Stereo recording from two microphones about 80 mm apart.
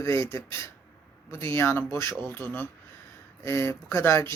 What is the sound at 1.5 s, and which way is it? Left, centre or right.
Speech, left.